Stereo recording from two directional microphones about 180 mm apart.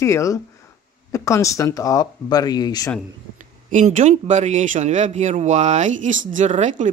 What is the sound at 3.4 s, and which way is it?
Speech, 45° right (ahead or behind).